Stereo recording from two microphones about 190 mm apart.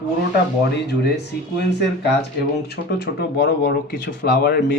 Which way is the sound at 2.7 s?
60° left (ahead or behind).